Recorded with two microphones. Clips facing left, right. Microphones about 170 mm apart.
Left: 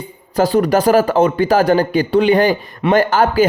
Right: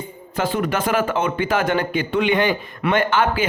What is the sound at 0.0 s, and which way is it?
Speech, 35° left (ahead or behind).